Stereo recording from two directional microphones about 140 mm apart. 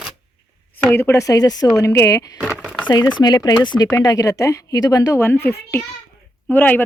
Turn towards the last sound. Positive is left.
turn(degrees=15)  # may be behind; listen again after turning